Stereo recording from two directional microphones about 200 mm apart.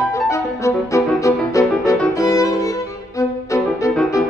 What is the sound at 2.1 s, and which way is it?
Violin, 15° left (ahead or behind).